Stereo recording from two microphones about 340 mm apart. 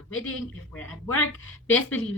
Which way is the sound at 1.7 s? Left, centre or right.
Centre.